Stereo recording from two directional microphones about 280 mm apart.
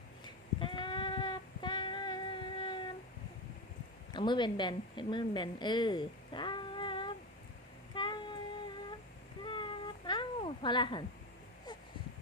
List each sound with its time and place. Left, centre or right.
0.6 s female singing: centre
4.1 s speech: centre
7.9 s a sound: centre